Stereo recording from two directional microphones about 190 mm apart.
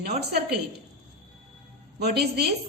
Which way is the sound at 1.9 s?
60° right (ahead or behind).